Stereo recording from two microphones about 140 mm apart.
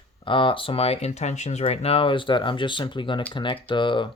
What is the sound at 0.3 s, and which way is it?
Speech, 40° left (ahead or behind).